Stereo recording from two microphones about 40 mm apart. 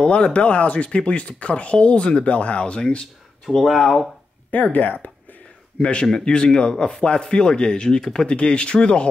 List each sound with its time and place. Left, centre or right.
0.0 s speech: left
3.4 s speech: centre
4.7 s speech: left
5.8 s a man's voice: left
8.3 s speech: left